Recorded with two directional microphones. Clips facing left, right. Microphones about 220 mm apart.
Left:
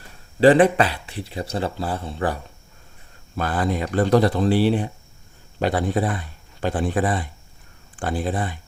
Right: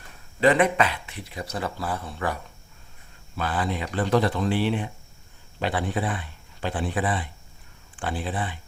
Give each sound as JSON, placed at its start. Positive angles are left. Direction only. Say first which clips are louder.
{"t": 0.3, "sound": "speech", "louder": "left 6 dB", "side_deg": 30}
{"t": 3.3, "sound": "speech", "louder": "left 4 dB", "side_deg": 45}